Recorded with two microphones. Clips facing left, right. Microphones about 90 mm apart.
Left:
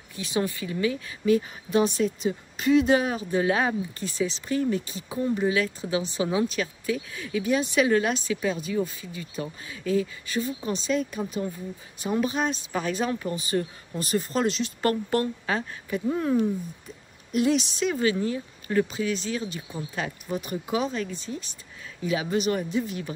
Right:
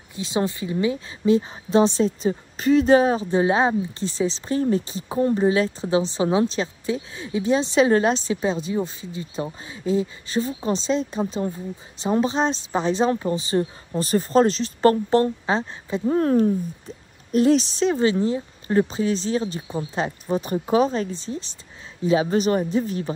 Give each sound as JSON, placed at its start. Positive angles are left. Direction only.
{"t": 0.1, "sound": "a woman's voice", "side_deg": -20}
{"t": 16.1, "sound": "speech", "side_deg": -45}